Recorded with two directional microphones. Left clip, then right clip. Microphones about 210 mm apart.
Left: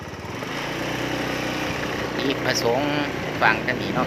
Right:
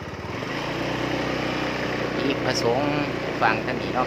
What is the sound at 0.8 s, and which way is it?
Vehicle, 50° left (ahead or behind).